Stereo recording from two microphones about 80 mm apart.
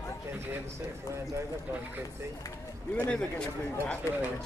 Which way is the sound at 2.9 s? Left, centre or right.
Centre.